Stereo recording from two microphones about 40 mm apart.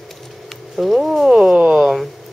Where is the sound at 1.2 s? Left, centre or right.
Centre.